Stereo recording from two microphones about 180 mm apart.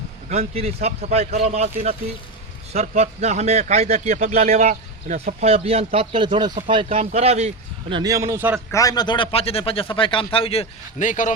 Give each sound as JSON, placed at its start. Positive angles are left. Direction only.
{"t": 0.3, "sound": "a man's voice", "side_deg": -35}
{"t": 8.7, "sound": "a man's voice", "side_deg": 20}